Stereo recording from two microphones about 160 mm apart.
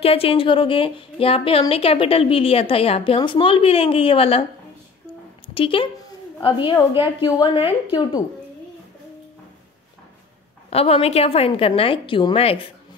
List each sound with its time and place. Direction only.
0.0 s a woman's voice: 35° left (ahead or behind)
5.5 s a woman's voice: 35° left (ahead or behind)
10.7 s a woman's voice: 40° left (ahead or behind)